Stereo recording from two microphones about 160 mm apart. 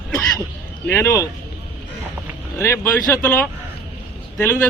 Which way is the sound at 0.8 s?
15° left (ahead or behind).